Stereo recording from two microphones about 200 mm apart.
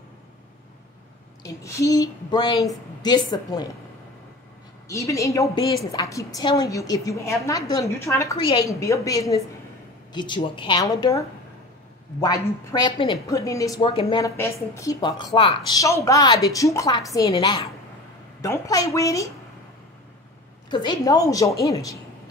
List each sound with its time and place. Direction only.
1.4 s a woman's voice: 15° left (ahead or behind)
4.8 s a woman's voice: 15° left (ahead or behind)
20.7 s a woman's voice: 20° left (ahead or behind)